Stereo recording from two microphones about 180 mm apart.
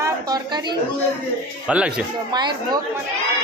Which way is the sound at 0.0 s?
20° right (ahead or behind).